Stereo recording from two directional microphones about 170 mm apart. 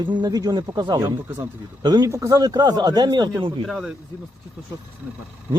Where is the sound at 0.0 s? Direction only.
25° right (ahead or behind).